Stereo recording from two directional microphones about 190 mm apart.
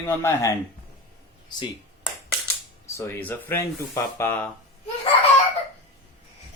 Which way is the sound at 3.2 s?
10° left (ahead or behind).